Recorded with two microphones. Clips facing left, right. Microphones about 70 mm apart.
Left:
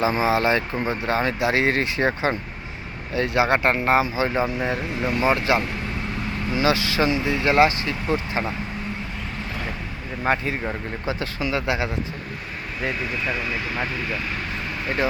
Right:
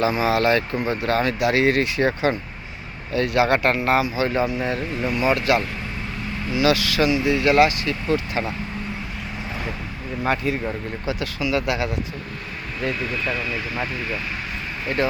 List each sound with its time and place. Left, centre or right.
0.0 s speech: left
10.2 s speech: left
13.2 s speech: centre